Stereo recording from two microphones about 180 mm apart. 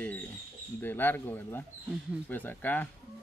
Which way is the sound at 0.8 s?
10° left (ahead or behind).